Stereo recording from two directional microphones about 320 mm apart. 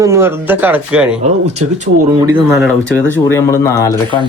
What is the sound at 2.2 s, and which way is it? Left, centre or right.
Speech, centre.